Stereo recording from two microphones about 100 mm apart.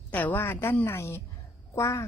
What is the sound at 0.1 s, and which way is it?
A woman's voice, 15° left (ahead or behind).